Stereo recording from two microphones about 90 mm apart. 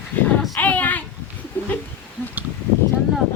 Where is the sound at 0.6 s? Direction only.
20° left (ahead or behind).